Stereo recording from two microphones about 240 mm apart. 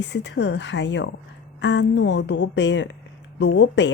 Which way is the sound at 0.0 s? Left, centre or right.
Left.